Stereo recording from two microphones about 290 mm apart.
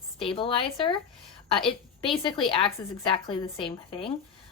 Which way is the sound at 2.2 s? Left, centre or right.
Centre.